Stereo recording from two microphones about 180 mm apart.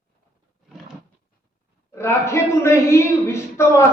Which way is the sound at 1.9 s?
15° left (ahead or behind).